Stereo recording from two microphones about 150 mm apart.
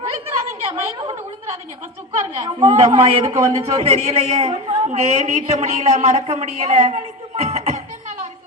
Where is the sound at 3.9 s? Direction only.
45° right (ahead or behind).